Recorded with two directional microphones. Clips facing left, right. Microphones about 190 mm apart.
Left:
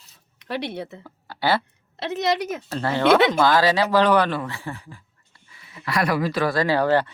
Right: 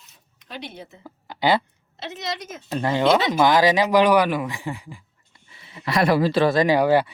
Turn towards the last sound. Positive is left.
turn(degrees=-10)  # may be behind; listen again after turning